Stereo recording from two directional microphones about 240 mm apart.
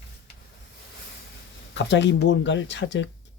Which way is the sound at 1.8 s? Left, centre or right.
Left.